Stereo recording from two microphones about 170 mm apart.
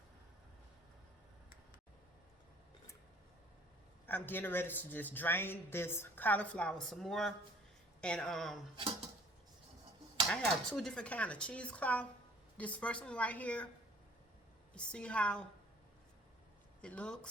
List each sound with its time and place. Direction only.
4.0 s a man's voice: 10° left (ahead or behind)
8.7 s speech: 35° right (ahead or behind)
10.2 s a man's voice: centre (ahead or behind)
14.7 s a man's voice: 5° left (ahead or behind)
16.8 s a man's voice: 5° left (ahead or behind)